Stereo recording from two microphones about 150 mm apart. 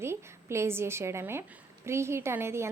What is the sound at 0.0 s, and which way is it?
A woman's voice, 15° right (ahead or behind).